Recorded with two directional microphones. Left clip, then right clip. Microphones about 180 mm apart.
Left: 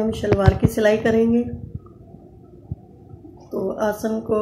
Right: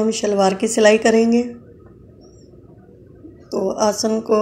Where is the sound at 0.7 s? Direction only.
10° right (ahead or behind).